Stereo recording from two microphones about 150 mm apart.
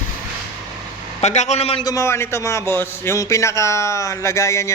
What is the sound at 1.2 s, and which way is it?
Speech, 50° left (ahead or behind).